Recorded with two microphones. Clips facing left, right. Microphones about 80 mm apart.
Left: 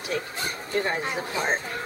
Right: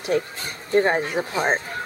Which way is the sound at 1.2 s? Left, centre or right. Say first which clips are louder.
Right 4 dB; right.